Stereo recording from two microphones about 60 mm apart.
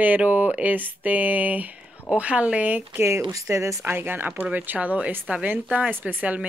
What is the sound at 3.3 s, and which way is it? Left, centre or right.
Speech, right.